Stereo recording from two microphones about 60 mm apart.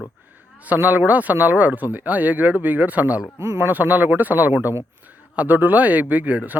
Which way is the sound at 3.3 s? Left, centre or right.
Right.